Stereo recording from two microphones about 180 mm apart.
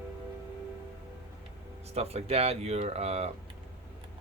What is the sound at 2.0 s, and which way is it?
Speech, 35° right (ahead or behind).